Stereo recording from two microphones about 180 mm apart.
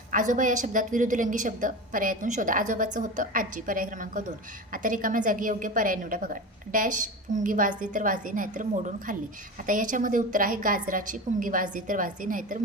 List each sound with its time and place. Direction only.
0.1 s a woman's voice: 45° right (ahead or behind)